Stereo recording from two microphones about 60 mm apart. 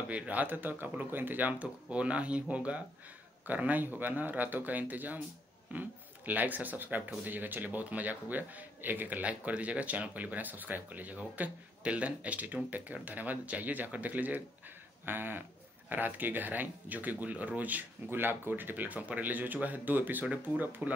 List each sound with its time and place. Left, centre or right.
0.1 s speech: right
15.0 s a sound: right
15.9 s speech: right